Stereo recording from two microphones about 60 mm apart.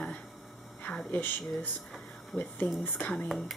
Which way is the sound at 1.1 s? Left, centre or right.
Left.